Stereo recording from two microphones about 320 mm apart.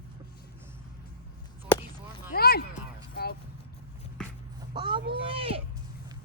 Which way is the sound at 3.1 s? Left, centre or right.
Left.